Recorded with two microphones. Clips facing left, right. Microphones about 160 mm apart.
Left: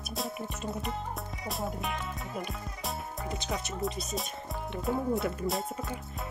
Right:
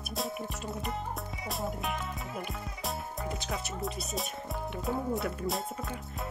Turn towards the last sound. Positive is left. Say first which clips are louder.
# left 1 dB
turn(degrees=0)  # may be behind; listen again after turning